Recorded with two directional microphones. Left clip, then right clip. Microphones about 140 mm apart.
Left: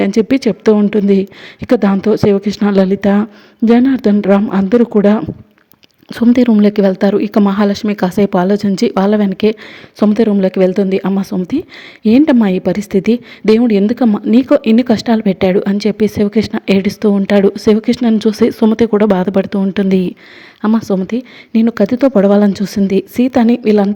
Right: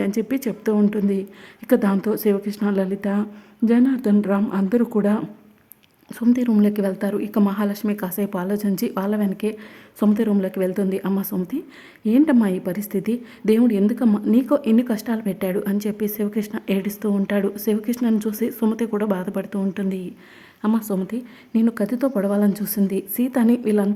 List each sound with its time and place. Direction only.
0.0 s speech: 35° left (ahead or behind)
6.1 s speech: 40° left (ahead or behind)
20.7 s speech: 30° left (ahead or behind)